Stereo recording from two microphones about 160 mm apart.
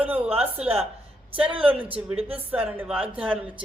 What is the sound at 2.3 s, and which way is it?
A man's voice, 10° right (ahead or behind).